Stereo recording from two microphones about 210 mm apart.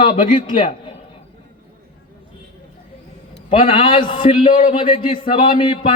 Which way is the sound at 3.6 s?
25° left (ahead or behind).